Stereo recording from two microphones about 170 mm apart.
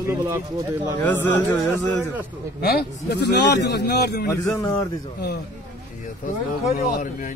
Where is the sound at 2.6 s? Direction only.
70° left (ahead or behind).